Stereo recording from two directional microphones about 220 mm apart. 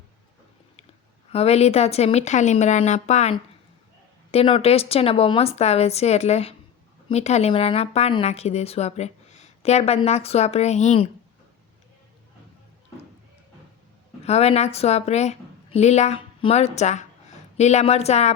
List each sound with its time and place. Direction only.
1.3 s a woman's voice: 30° left (ahead or behind)
14.3 s a woman's voice: 30° left (ahead or behind)